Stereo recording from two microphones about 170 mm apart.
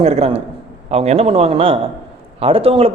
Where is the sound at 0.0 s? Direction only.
40° right (ahead or behind).